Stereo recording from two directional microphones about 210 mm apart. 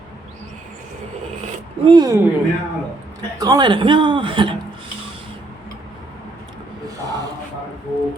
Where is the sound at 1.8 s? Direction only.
20° right (ahead or behind).